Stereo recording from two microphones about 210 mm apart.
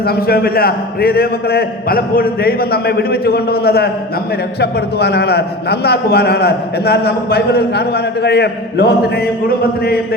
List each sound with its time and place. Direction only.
0.3 s a man's voice: 45° left (ahead or behind)